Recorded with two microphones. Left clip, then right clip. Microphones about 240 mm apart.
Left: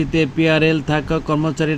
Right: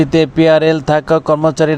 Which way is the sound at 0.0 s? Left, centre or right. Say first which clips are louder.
Right 7 dB; centre.